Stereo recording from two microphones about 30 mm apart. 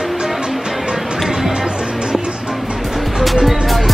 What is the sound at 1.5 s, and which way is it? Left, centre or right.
Music, right.